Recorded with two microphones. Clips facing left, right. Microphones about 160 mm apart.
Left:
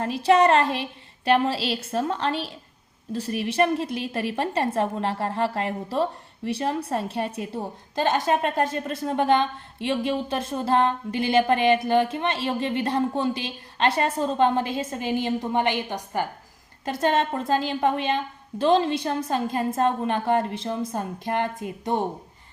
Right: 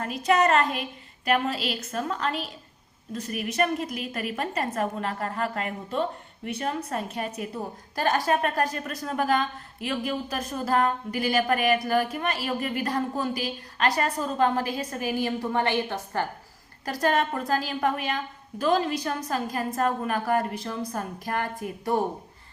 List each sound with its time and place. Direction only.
0.0 s a woman's voice: 30° left (ahead or behind)